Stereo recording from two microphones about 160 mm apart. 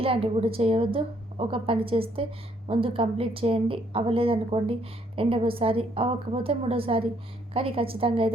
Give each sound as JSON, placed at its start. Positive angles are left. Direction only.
{"t": 0.0, "sound": "a woman's voice", "side_deg": -35}